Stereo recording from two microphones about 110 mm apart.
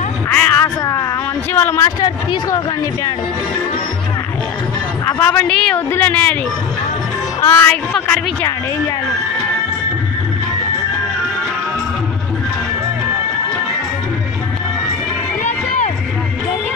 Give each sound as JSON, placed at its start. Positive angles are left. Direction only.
{"t": 0.3, "sound": "a sound", "side_deg": 15}
{"t": 1.5, "sound": "a woman's voice", "side_deg": 20}
{"t": 2.0, "sound": "speech", "side_deg": 40}
{"t": 5.0, "sound": "a woman's voice", "side_deg": 20}
{"t": 5.5, "sound": "speech", "side_deg": 10}
{"t": 7.4, "sound": "a woman's voice", "side_deg": 20}